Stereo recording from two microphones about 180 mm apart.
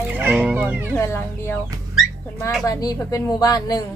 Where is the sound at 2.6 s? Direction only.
20° left (ahead or behind).